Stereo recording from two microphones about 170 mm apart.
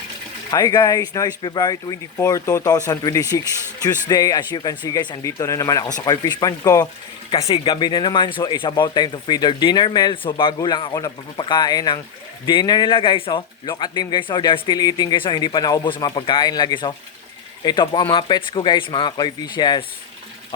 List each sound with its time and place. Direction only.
0.5 s speech: 20° left (ahead or behind)